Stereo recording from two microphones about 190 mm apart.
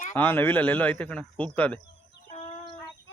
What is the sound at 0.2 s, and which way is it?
A man's voice, 10° left (ahead or behind).